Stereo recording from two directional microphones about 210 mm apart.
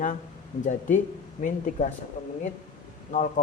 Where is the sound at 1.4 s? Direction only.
35° left (ahead or behind).